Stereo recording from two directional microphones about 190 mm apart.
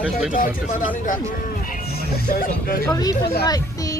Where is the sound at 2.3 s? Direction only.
50° left (ahead or behind).